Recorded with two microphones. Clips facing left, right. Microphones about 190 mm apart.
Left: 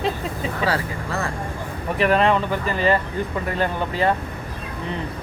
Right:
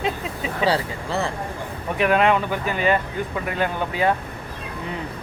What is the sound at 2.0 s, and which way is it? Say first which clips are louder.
Speech: even; 5° right (ahead or behind).